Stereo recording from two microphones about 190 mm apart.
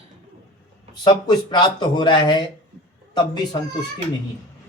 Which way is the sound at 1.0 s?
25° left (ahead or behind).